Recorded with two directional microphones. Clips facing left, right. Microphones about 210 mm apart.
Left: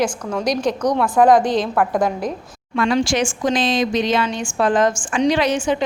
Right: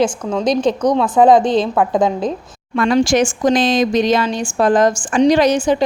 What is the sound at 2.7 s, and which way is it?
Speech, 45° right (ahead or behind).